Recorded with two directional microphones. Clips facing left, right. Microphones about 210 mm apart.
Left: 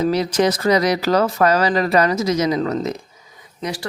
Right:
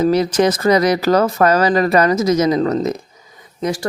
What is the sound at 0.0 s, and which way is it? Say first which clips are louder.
Speech: right 3 dB; 45° right (ahead or behind).